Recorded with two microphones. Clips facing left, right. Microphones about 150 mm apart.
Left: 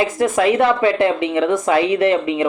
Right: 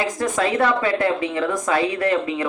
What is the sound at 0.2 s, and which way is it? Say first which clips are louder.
A woman's voice: left 5 dB; 20° left (ahead or behind).